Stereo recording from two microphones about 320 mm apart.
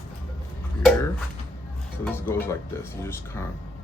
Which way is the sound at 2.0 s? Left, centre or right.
Centre.